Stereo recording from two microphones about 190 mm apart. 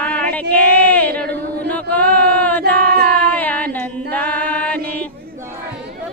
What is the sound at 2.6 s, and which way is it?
Singing, 55° right (ahead or behind).